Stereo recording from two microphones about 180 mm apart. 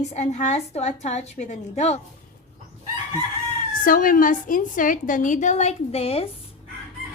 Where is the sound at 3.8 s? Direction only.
50° left (ahead or behind); by 6.3 s 35° left (ahead or behind).